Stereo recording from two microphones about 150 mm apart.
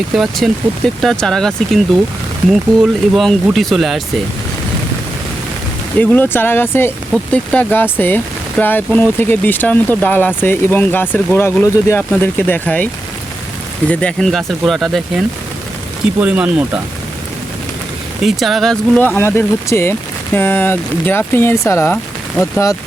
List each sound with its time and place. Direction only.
0.1 s speech: centre (ahead or behind)
6.0 s speech: 15° left (ahead or behind)
16.2 s speech: 10° right (ahead or behind)
18.2 s speech: centre (ahead or behind); by 22.8 s 20° left (ahead or behind)